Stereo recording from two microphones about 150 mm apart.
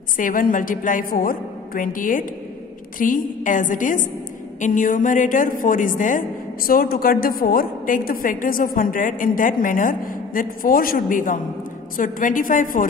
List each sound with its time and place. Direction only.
0.2 s a woman's voice: 65° left (ahead or behind)